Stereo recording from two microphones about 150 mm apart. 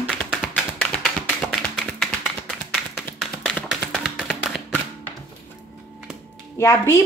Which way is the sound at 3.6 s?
5° right (ahead or behind).